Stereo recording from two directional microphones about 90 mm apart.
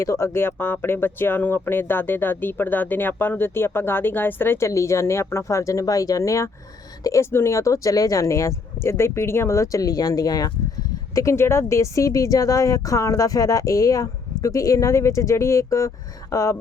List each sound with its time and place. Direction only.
0.0 s speech: 35° left (ahead or behind)